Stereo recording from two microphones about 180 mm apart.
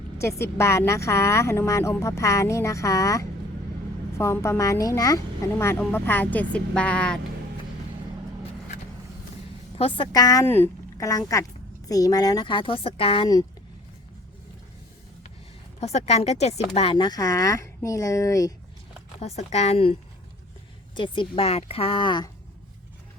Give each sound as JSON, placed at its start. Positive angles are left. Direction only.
{"t": 0.2, "sound": "speech", "side_deg": 15}
{"t": 9.7, "sound": "speech", "side_deg": 30}
{"t": 15.8, "sound": "speech", "side_deg": 35}
{"t": 19.2, "sound": "speech", "side_deg": 40}